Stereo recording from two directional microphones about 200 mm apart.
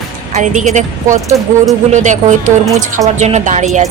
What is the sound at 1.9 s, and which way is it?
A woman's voice, 35° right (ahead or behind).